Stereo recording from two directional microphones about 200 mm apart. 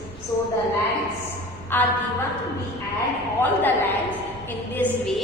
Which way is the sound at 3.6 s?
10° left (ahead or behind).